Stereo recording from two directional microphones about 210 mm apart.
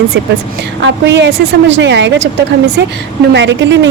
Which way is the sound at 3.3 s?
60° right (ahead or behind).